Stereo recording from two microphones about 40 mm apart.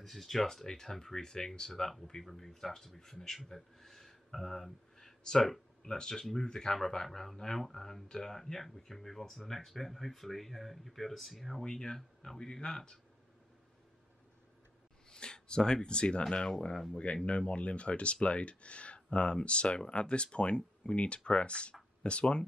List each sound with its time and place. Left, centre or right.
0.0 s speech: centre
11.6 s speech: centre
15.0 s speech: left